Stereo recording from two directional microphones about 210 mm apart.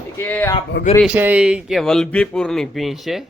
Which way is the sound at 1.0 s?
5° right (ahead or behind).